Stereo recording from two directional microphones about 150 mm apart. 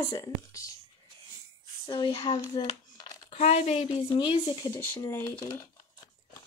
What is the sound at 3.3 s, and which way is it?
Speech, 45° left (ahead or behind).